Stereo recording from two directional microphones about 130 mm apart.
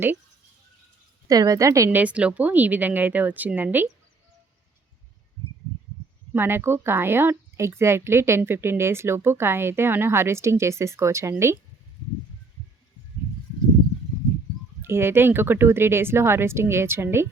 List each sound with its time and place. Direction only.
1.3 s speech: 25° right (ahead or behind)
2.0 s speech: 10° right (ahead or behind)
6.3 s speech: 15° right (ahead or behind)
14.8 s speech: 20° right (ahead or behind)